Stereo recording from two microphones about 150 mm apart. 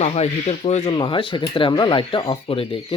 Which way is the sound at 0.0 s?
45° left (ahead or behind).